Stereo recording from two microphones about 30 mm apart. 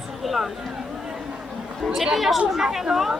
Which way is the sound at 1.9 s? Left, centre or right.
Centre.